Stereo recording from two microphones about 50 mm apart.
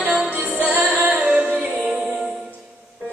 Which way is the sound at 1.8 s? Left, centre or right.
Centre.